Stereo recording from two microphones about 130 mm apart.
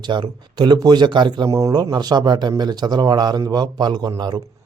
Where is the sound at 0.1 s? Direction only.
35° right (ahead or behind).